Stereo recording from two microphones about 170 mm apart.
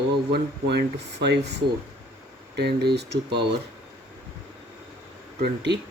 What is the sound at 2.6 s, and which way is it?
Speech, 75° right (ahead or behind).